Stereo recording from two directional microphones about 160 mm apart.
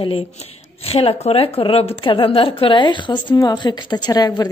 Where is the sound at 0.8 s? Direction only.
40° left (ahead or behind).